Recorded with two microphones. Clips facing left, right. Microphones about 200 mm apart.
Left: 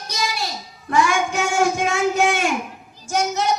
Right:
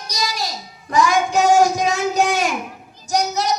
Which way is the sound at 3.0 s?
40° right (ahead or behind).